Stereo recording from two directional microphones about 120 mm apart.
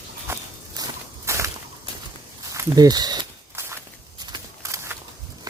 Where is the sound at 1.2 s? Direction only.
25° right (ahead or behind).